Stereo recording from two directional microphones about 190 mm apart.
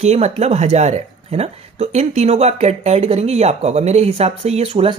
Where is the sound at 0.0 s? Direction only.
35° right (ahead or behind).